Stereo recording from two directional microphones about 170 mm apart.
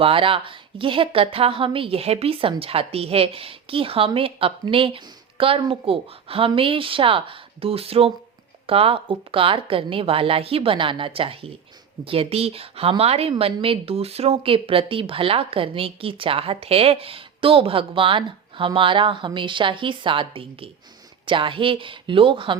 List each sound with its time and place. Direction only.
0.0 s a woman's voice: 30° right (ahead or behind)